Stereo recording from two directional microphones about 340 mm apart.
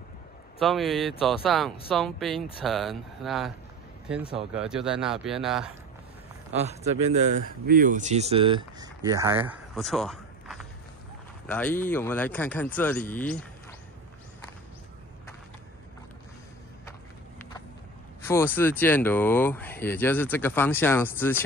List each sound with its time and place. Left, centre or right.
0.6 s speech: centre
4.6 s speech: centre
6.6 s speech: centre
18.2 s speech: centre